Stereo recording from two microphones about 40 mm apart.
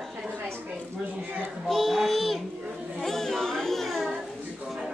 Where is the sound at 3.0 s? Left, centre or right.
Centre.